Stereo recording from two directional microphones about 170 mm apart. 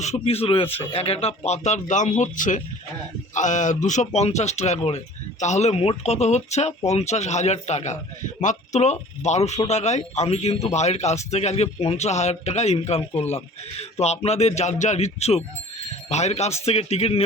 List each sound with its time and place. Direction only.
0.0 s speech: 40° left (ahead or behind)